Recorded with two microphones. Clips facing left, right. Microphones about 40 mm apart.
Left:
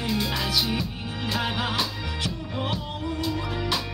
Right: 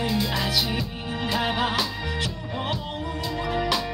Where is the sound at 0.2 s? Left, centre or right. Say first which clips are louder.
Right 2 dB; centre.